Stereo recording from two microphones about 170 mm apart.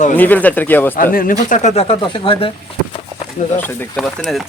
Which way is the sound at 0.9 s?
55° left (ahead or behind).